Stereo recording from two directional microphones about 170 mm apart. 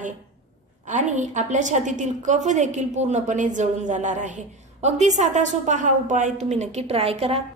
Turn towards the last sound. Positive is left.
turn(degrees=-35)  # may be behind; listen again after turning